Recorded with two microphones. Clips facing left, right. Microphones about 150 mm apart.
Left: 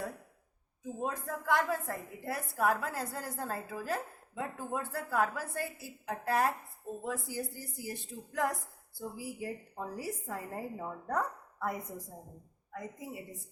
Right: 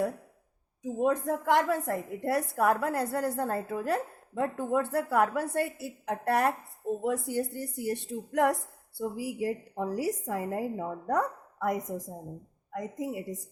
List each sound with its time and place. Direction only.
0.8 s a woman's voice: 75° right (ahead or behind)
9.0 s a woman's voice: 85° right